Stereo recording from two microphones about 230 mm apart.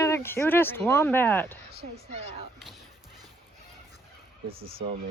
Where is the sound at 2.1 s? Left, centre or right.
Right.